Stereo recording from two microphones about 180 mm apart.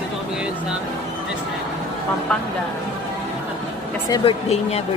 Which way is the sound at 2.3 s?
5° left (ahead or behind).